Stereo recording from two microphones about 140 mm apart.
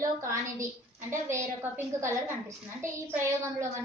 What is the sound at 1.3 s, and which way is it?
Speech, 20° right (ahead or behind).